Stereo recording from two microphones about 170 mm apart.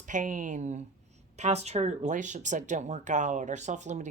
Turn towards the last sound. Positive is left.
turn(degrees=-45)  # may be behind; listen again after turning